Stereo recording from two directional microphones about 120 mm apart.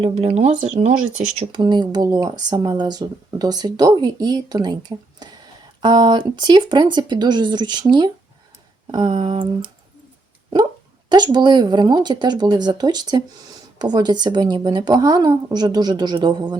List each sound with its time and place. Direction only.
0.0 s speech: 55° right (ahead or behind); by 0.9 s 80° right
1.5 s speech: 40° right (ahead or behind)
11.1 s speech: 35° right (ahead or behind)